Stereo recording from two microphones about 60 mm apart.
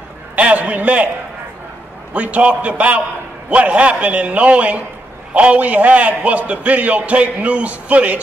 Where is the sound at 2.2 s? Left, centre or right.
Right.